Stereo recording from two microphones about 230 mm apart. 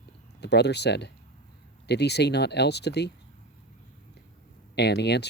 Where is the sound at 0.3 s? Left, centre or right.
Left.